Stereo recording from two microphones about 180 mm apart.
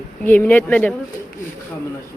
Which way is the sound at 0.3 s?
10° left (ahead or behind).